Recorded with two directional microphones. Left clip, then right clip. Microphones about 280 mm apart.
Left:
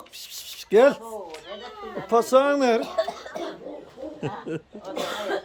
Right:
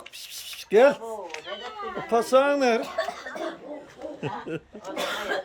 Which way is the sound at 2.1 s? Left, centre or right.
Centre.